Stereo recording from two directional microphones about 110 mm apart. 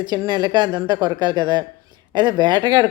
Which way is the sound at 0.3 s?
40° right (ahead or behind).